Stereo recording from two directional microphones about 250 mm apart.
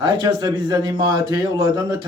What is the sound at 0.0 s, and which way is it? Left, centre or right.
A man's voice, centre.